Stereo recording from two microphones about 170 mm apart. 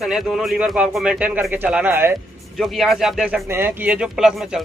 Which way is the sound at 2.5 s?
Centre (ahead or behind).